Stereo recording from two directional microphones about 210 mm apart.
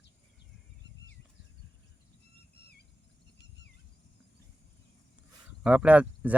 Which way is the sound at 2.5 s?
50° left (ahead or behind).